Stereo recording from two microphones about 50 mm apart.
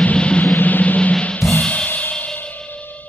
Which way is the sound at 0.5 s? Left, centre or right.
Left.